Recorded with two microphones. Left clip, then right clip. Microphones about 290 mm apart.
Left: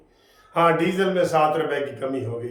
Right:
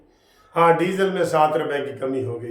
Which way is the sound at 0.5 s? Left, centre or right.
Centre.